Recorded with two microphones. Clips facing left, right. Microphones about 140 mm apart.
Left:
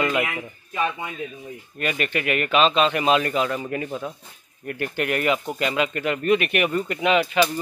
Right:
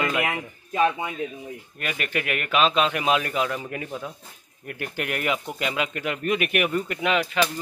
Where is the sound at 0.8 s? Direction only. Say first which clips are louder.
Right 3 dB; 20° right (ahead or behind).